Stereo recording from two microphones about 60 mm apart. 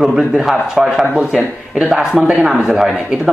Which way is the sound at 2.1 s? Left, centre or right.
Centre.